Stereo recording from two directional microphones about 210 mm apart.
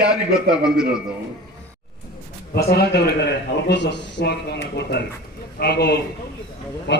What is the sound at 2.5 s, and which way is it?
A man's voice, 50° left (ahead or behind).